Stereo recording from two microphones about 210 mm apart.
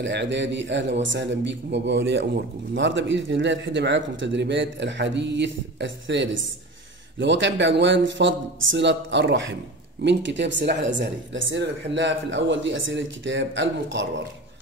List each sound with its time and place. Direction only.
0.0 s a man's voice: 55° right (ahead or behind)